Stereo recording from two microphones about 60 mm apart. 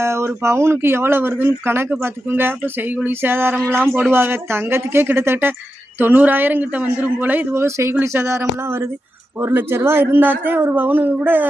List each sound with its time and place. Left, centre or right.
0.0 s a man's voice: right
9.4 s a man's voice: right